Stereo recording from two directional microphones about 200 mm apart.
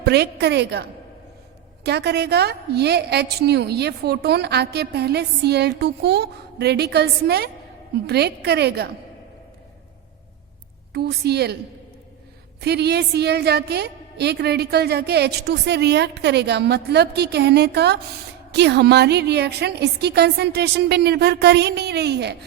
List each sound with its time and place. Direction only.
0.0 s a woman's voice: 55° right (ahead or behind)
10.9 s a woman's voice: 55° right (ahead or behind)
12.5 s a woman's voice: 55° right (ahead or behind)